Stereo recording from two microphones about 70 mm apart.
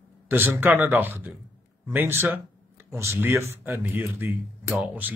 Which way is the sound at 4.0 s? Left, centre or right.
Right.